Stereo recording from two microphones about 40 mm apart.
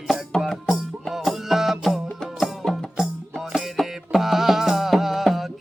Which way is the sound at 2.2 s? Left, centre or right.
Centre.